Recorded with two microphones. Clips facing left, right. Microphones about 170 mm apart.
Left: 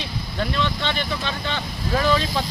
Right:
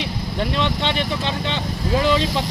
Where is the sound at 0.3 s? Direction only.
25° right (ahead or behind).